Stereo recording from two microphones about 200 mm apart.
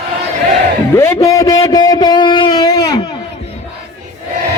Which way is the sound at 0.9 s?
15° left (ahead or behind).